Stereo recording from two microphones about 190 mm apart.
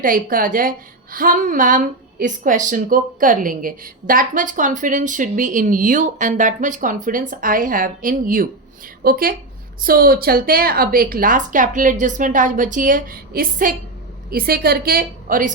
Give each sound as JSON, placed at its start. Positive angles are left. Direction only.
{"t": 0.0, "sound": "a woman's voice", "side_deg": -45}